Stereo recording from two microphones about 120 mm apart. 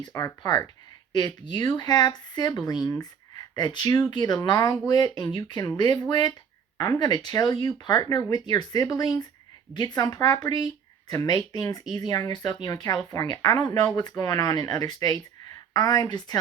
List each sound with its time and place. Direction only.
0.0 s speech: 30° left (ahead or behind)